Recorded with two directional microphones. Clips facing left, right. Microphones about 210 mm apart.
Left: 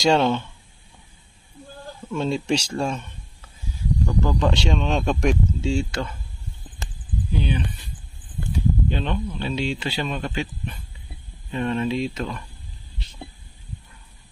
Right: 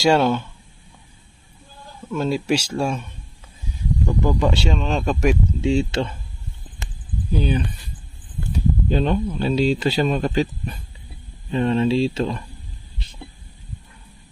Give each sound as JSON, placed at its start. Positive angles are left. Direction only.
{"t": 0.0, "sound": "speech", "side_deg": -5}
{"t": 2.1, "sound": "speech", "side_deg": -5}
{"t": 5.5, "sound": "speech", "side_deg": -20}
{"t": 7.3, "sound": "speech", "side_deg": -40}